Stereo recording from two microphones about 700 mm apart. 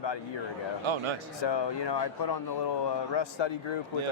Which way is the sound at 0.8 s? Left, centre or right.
Right.